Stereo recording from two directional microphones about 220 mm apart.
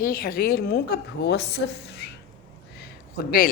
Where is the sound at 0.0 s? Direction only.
40° left (ahead or behind).